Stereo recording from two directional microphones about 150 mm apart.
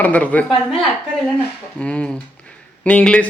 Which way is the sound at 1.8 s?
10° left (ahead or behind).